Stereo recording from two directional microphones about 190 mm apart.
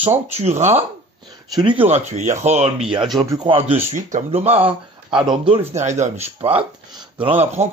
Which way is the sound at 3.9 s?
40° right (ahead or behind).